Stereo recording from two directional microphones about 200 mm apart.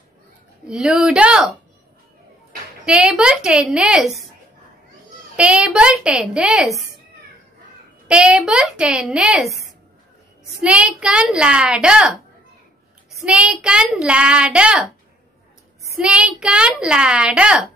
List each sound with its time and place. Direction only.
0.7 s a child's voice: centre (ahead or behind)
2.8 s a child's voice: 5° right (ahead or behind)
5.3 s a child's voice: 5° right (ahead or behind)
8.1 s a child's voice: 5° right (ahead or behind)
13.2 s a child's voice: 5° right (ahead or behind)
15.9 s a child's voice: 5° right (ahead or behind)